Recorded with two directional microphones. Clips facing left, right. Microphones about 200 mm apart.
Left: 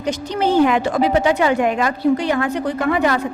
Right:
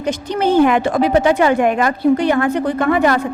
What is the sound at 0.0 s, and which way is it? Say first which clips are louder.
Speech: right 2 dB; 50° right (ahead or behind).